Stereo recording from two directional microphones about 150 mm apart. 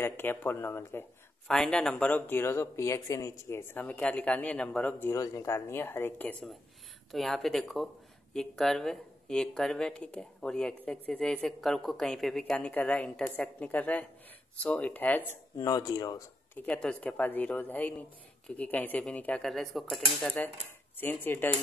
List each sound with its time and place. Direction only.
0.0 s speech: 15° left (ahead or behind)
1.5 s speech: 5° left (ahead or behind)
15.5 s speech: 25° left (ahead or behind)
16.5 s speech: 10° left (ahead or behind)